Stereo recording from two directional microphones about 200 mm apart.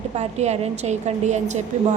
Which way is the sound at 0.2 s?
35° right (ahead or behind).